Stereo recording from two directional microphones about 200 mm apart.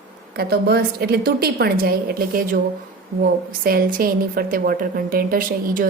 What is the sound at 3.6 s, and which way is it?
A woman's voice, 45° right (ahead or behind).